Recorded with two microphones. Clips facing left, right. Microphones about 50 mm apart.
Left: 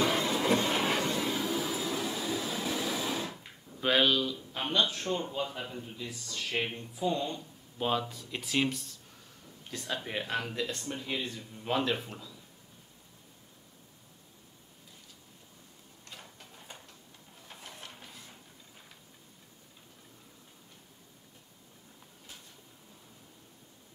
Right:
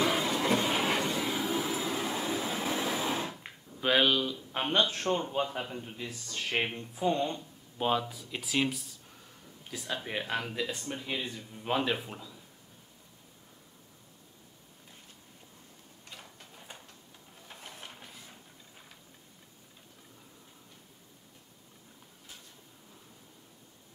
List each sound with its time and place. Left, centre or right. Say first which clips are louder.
0.0 s vehicle: even; centre
1.5 s train: right 1 dB; right
3.8 s speech: even; centre
4.5 s speech: right 3 dB; right
7.8 s speech: right 1 dB; centre
16.1 s a sound: even; centre
17.5 s printer: even; centre
17.9 s a sound: even; centre